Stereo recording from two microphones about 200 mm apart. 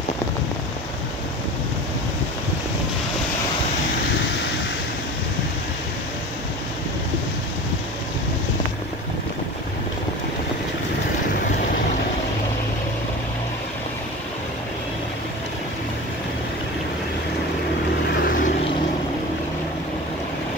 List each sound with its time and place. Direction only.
18.2 s vehicle: 45° left (ahead or behind)